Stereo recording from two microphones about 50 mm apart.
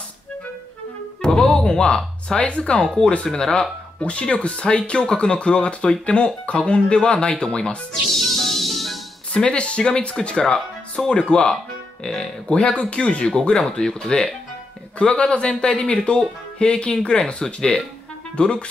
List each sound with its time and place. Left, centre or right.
1.2 s speech: centre
8.1 s music: centre
9.3 s speech: left
13.3 s speech: centre